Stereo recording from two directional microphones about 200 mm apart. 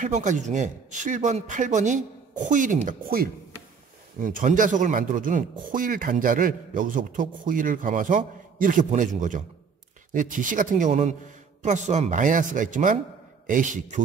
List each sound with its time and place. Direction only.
0.0 s speech: 35° right (ahead or behind)